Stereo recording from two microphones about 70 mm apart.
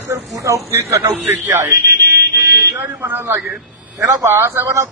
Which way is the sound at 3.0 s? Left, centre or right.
Right.